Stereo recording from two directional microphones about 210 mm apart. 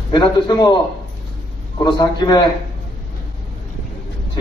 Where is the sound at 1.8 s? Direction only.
20° left (ahead or behind).